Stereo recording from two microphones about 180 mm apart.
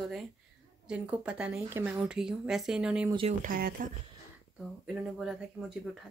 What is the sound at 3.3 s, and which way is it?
Speech, 50° right (ahead or behind).